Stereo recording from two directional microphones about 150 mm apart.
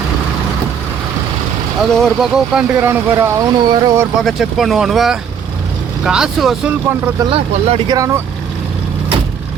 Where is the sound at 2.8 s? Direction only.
15° right (ahead or behind).